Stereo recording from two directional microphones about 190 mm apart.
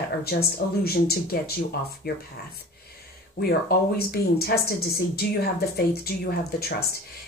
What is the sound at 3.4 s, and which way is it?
A woman's voice, 55° left (ahead or behind).